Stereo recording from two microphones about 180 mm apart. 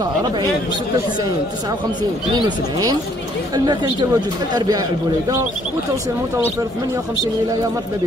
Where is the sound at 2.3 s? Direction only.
20° right (ahead or behind).